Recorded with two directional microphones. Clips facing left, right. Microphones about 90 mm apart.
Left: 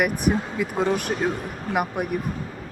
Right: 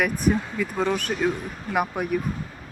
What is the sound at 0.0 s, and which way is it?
Speech, 10° left (ahead or behind).